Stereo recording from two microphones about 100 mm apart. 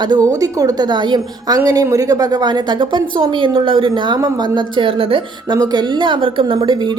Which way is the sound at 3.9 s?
45° right (ahead or behind).